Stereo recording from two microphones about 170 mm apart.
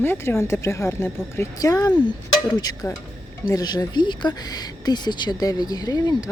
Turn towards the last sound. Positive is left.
turn(degrees=20)  # may be behind; listen again after turning